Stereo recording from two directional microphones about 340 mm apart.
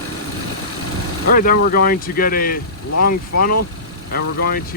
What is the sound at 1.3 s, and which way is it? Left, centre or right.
Speech, left.